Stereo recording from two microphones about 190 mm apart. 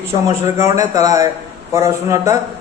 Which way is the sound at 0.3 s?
20° right (ahead or behind).